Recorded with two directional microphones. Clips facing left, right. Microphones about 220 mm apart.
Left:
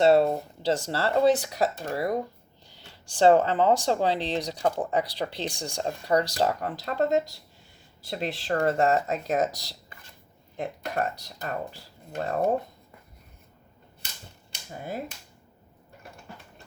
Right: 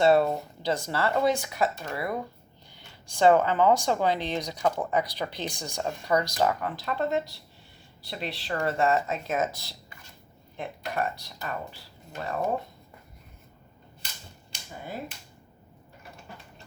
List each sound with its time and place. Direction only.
0.0 s speech: 30° left (ahead or behind)
3.2 s speech: 30° left (ahead or behind); by 12.5 s 50° left (ahead or behind)